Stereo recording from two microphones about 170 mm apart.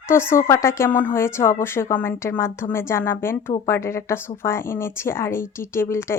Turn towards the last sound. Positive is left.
turn(degrees=15)  # may be behind; listen again after turning